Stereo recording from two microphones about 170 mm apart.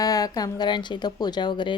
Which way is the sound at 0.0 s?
20° left (ahead or behind).